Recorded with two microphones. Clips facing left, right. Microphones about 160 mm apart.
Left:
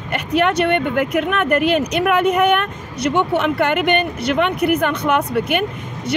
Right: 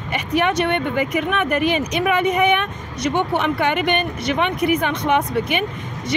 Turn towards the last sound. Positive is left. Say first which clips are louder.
# left 1 dB
turn(degrees=55)  # may be behind; listen again after turning